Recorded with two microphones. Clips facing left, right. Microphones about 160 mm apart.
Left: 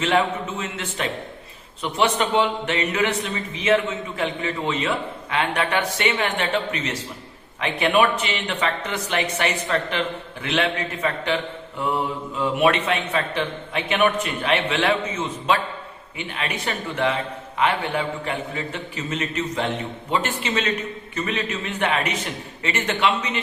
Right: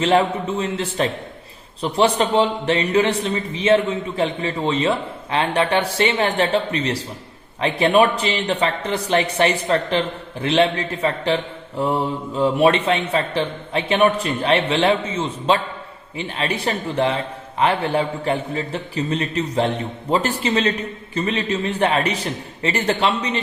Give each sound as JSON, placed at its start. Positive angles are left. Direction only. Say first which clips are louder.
{"t": 0.0, "sound": "a man's voice", "louder": "right 4 dB", "side_deg": -35}
{"t": 12.4, "sound": "a man's voice", "louder": "right 4 dB", "side_deg": -35}